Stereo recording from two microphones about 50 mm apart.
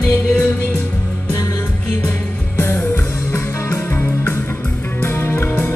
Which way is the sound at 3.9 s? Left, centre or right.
Left.